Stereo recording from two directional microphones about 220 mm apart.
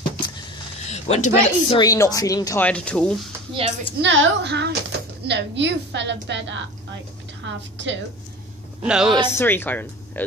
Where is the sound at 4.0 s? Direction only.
55° right (ahead or behind).